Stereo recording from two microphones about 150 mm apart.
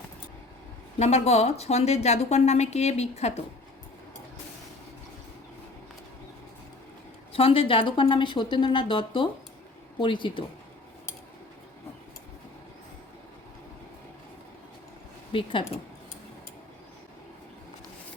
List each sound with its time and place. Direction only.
0.9 s a woman's voice: 45° left (ahead or behind)
7.3 s speech: 40° left (ahead or behind)
15.3 s speech: 35° left (ahead or behind)